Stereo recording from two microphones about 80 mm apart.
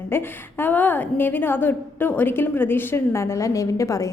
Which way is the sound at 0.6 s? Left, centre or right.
Left.